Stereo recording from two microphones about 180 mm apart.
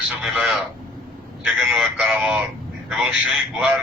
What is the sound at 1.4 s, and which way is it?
A man's voice, 5° right (ahead or behind).